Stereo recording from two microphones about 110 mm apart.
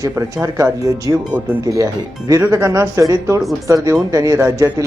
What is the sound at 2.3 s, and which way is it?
Speech, 25° right (ahead or behind).